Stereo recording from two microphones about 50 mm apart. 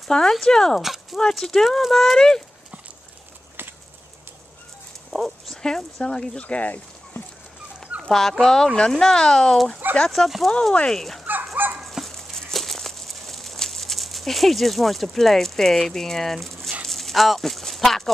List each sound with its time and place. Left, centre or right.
0.1 s speech: centre
5.1 s speech: centre
6.0 s speech: centre
8.1 s speech: centre
10.5 s speech: centre
11.0 s speech: centre
11.8 s dog: centre
12.4 s a sound: centre